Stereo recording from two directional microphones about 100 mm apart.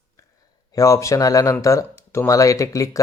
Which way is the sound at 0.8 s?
35° left (ahead or behind).